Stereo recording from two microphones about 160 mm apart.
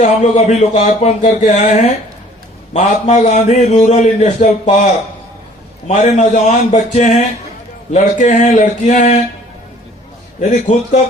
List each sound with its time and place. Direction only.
0.0 s a man's voice: 50° left (ahead or behind)
5.9 s a man's voice: 50° left (ahead or behind)
10.5 s a man's voice: 50° left (ahead or behind)